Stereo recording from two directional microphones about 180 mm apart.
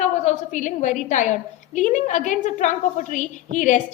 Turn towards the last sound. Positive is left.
turn(degrees=45)  # may be behind; listen again after turning